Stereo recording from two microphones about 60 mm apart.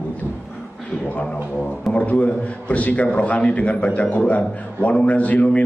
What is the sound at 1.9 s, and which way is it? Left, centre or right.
A man's voice, left.